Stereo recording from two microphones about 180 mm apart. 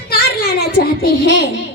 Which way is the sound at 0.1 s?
60° left (ahead or behind).